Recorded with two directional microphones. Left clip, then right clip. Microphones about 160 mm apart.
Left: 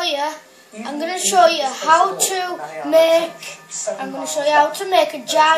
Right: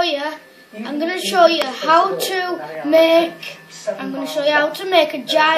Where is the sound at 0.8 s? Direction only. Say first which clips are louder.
Right 1 dB; 25° left (ahead or behind).